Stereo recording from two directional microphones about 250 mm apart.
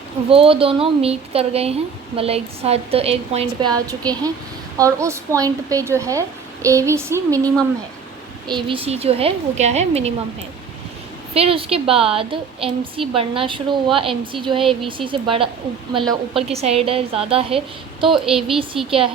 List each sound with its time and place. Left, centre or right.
0.3 s a woman's voice: right
11.3 s a woman's voice: right
18.1 s speech: centre